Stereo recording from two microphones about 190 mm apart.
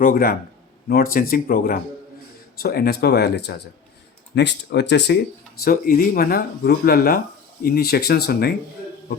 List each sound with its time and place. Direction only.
0.0 s speech: 50° left (ahead or behind); by 5.1 s 65° left (ahead or behind)
5.6 s speech: 50° left (ahead or behind)